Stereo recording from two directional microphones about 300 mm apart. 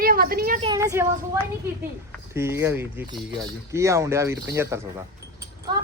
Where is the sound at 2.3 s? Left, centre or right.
Centre.